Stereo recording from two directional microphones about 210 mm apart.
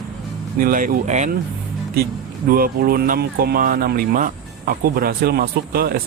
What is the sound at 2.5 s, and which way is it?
Speech, 45° right (ahead or behind).